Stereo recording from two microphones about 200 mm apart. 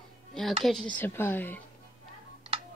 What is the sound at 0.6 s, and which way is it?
Speech, centre (ahead or behind).